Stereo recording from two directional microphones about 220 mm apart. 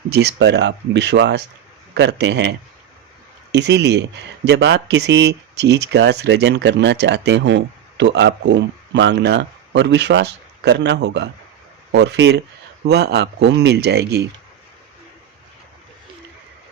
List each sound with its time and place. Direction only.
0.1 s speech: 50° right (ahead or behind)